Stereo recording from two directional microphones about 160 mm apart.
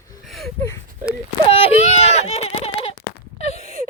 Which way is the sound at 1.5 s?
35° left (ahead or behind).